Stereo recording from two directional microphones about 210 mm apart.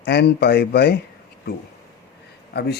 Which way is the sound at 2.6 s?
50° left (ahead or behind).